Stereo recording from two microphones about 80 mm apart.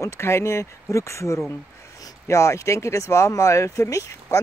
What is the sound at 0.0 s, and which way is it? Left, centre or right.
Speech, left.